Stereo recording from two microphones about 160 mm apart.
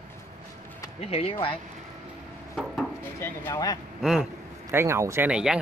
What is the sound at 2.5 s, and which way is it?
Wood, 5° right (ahead or behind).